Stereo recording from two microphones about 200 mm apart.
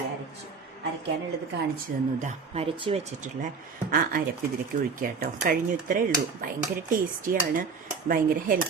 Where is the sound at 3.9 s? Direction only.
45° right (ahead or behind).